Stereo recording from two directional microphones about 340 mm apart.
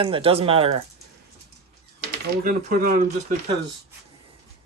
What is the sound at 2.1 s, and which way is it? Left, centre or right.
Speech, right.